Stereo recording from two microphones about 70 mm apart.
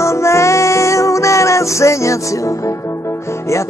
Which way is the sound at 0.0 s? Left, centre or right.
Left.